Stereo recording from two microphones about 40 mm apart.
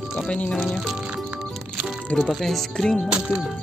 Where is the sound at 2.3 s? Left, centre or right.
Centre.